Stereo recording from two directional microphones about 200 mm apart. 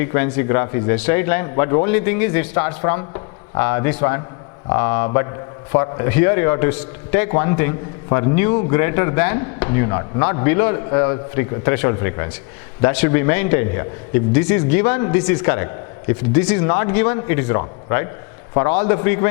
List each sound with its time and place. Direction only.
0.0 s a man's voice: 15° left (ahead or behind)
3.0 s a sound: 25° left (ahead or behind)
3.6 s a man's voice: 15° left (ahead or behind)